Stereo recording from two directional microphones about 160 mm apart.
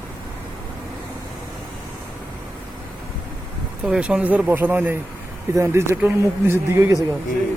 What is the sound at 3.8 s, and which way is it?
Speech, 5° right (ahead or behind).